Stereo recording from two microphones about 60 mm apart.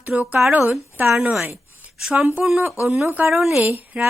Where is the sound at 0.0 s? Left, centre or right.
Right.